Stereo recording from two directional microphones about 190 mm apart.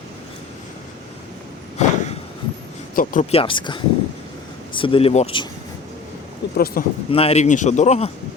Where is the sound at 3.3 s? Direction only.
30° left (ahead or behind).